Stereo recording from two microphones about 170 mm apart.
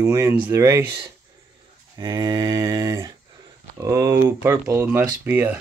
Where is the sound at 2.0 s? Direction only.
25° right (ahead or behind).